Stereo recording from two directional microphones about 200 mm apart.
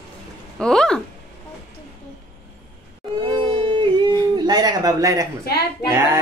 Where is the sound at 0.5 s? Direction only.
5° left (ahead or behind).